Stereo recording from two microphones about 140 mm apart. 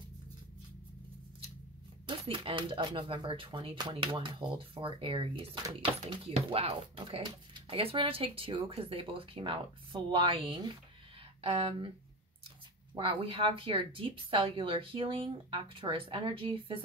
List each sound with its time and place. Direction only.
2.0 s speech: 40° right (ahead or behind)
12.9 s speech: 35° right (ahead or behind)